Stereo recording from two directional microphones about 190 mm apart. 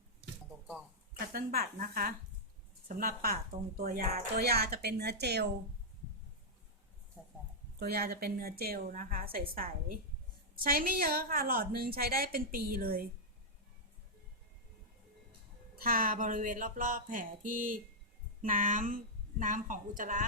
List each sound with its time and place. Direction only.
1.3 s a woman's voice: 50° right (ahead or behind)
7.8 s a woman's voice: 55° right (ahead or behind)
15.8 s a woman's voice: 50° right (ahead or behind)